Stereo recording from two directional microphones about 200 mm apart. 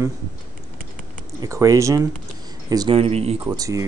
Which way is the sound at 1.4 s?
15° right (ahead or behind).